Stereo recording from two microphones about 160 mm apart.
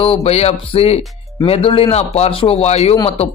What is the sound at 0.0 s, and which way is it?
Speech, 40° left (ahead or behind).